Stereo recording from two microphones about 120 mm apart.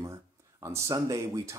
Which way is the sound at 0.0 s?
25° right (ahead or behind).